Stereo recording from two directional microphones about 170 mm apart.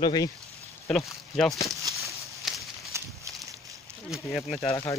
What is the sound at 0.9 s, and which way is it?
Speech, centre (ahead or behind).